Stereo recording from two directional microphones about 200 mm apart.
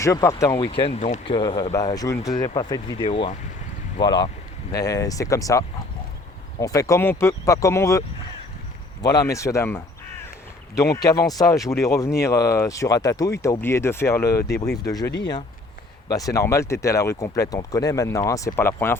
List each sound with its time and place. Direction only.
0.0 s speech: 15° left (ahead or behind)
0.5 s speech: 25° left (ahead or behind)
1.4 s speech: 20° left (ahead or behind)